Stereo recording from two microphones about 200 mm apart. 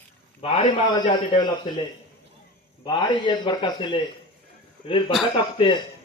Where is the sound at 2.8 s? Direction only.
25° left (ahead or behind).